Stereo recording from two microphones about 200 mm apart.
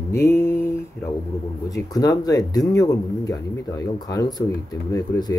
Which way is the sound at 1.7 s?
20° left (ahead or behind).